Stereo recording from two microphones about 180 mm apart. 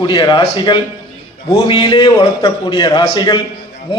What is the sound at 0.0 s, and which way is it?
A man's voice, 25° left (ahead or behind).